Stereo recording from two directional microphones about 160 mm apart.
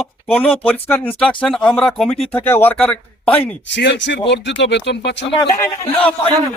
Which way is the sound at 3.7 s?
90° left.